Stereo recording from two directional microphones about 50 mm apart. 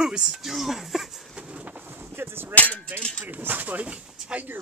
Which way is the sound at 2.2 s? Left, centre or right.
Right.